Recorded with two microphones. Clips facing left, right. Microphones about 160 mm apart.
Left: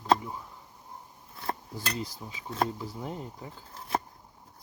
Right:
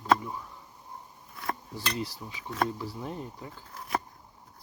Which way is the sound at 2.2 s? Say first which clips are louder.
Left 1 dB; 30° left (ahead or behind).